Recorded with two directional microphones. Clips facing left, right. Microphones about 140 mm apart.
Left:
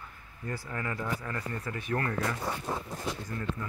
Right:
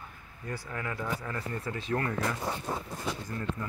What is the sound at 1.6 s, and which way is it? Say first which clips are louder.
Speech: right 2 dB; 25° right (ahead or behind).